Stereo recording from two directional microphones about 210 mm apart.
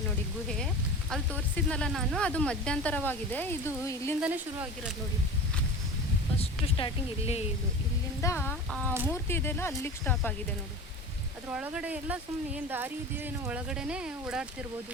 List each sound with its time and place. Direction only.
0.4 s speech: centre (ahead or behind)
4.2 s speech: 5° right (ahead or behind)
6.4 s speech: 25° left (ahead or behind)
8.2 s speech: 10° left (ahead or behind)
11.4 s speech: 5° right (ahead or behind)